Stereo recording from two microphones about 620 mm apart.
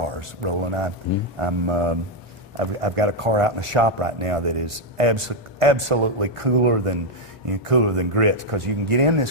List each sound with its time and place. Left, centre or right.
0.0 s speech: right